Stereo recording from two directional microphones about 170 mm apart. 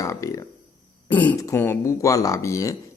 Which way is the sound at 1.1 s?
10° left (ahead or behind).